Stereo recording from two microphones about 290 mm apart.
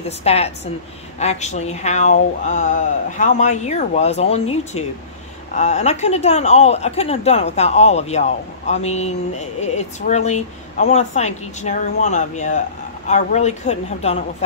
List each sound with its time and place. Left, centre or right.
0.2 s speech: left